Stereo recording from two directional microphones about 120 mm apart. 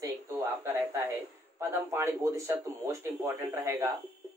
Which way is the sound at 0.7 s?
20° right (ahead or behind).